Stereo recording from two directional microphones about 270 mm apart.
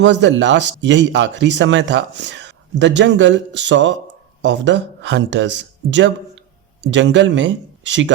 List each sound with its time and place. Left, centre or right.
0.0 s speech: right